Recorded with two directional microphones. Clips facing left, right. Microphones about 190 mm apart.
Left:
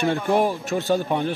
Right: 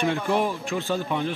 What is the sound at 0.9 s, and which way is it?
Speech, 50° left (ahead or behind).